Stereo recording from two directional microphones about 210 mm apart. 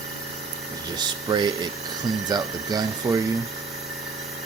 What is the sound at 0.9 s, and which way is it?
Speech, 20° right (ahead or behind).